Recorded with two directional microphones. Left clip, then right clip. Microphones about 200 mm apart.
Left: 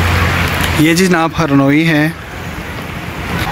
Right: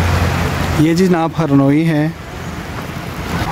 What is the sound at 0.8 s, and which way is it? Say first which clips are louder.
Speech: left 2 dB; 10° right (ahead or behind).